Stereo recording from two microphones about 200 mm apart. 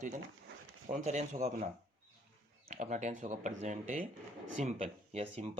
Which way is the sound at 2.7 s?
40° right (ahead or behind).